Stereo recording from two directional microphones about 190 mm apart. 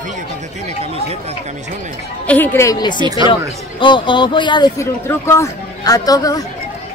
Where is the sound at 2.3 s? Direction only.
10° left (ahead or behind).